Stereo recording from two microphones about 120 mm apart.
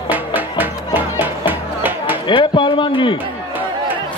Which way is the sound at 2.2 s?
40° left (ahead or behind).